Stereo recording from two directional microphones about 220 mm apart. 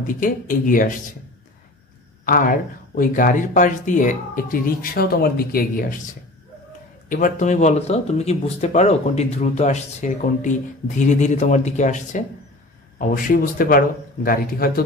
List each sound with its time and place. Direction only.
0.0 s speech: 40° left (ahead or behind)
2.2 s speech: 40° left (ahead or behind)
7.1 s speech: 35° left (ahead or behind)